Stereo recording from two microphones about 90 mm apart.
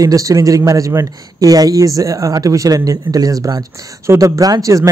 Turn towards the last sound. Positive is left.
turn(degrees=-40)  # may be behind; listen again after turning